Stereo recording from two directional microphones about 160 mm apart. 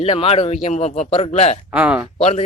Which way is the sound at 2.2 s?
40° left (ahead or behind).